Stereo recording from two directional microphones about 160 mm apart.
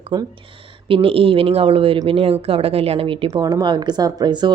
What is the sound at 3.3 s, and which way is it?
Speech, 25° right (ahead or behind).